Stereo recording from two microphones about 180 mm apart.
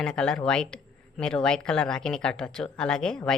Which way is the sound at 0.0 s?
5° left (ahead or behind).